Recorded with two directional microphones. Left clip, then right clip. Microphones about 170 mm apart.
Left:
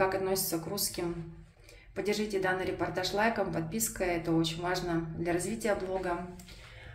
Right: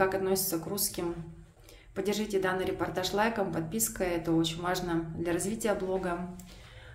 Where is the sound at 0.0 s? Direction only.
15° right (ahead or behind).